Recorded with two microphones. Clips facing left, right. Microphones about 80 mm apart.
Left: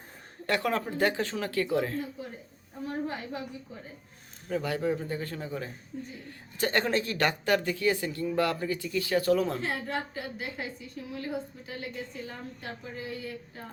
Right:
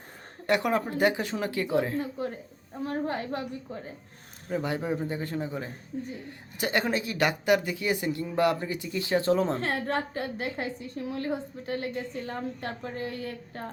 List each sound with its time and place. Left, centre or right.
0.4 s speech: centre
3.1 s a woman's voice: right
4.4 s speech: right
9.6 s a woman's voice: right